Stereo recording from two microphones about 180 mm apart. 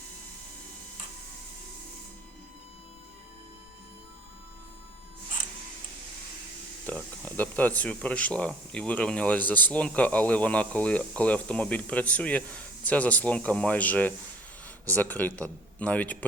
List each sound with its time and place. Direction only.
6.8 s speech: 10° left (ahead or behind)